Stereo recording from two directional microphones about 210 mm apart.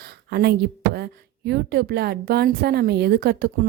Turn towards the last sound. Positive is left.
turn(degrees=-50)  # may be behind; listen again after turning